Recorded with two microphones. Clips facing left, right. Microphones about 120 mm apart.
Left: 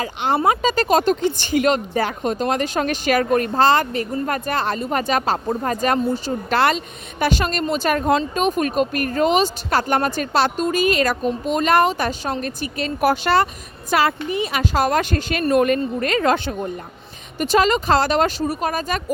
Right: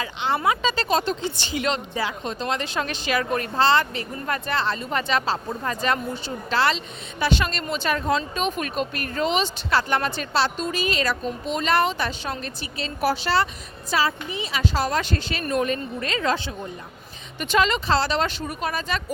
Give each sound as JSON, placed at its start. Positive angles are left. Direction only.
{"t": 0.0, "sound": "speech", "side_deg": 40}
{"t": 17.4, "sound": "speech", "side_deg": 40}